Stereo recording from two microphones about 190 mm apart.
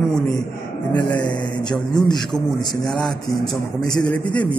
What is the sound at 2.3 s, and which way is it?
A man's voice, centre (ahead or behind).